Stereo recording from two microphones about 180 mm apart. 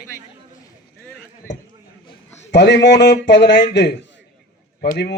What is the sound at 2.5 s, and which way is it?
A man's voice, 75° left (ahead or behind).